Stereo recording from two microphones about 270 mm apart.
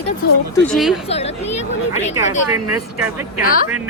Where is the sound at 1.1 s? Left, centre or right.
Left.